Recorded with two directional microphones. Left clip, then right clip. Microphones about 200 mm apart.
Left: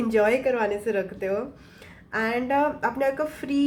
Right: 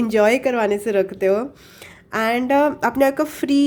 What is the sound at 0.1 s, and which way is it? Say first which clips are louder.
Speech: right 5 dB; 45° right (ahead or behind).